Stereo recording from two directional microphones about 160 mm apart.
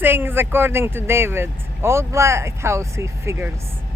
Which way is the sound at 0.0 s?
15° right (ahead or behind).